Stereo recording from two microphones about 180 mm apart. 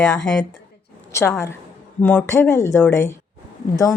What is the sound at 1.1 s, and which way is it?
A woman's voice, 15° left (ahead or behind).